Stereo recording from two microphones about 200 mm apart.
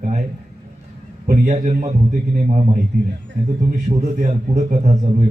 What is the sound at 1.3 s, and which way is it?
A man's voice, 35° right (ahead or behind).